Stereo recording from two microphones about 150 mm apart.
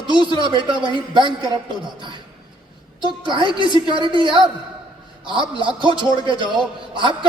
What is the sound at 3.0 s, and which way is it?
Speech, 30° right (ahead or behind).